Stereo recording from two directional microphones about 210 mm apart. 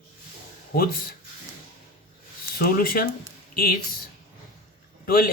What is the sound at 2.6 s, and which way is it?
Speech, 45° left (ahead or behind).